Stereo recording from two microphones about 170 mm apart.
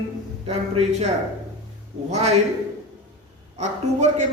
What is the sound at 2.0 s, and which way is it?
Speech, 40° right (ahead or behind).